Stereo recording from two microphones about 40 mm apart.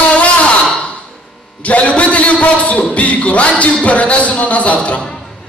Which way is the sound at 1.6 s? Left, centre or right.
Left.